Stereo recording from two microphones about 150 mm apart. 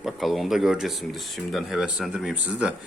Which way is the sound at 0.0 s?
Centre (ahead or behind).